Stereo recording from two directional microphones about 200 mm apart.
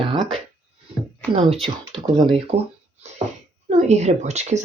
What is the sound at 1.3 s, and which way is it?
Speech, 30° right (ahead or behind).